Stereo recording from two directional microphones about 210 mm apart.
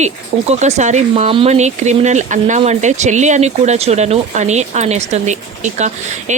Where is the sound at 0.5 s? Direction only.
35° right (ahead or behind).